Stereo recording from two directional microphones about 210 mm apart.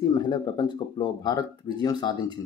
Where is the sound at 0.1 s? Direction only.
20° left (ahead or behind).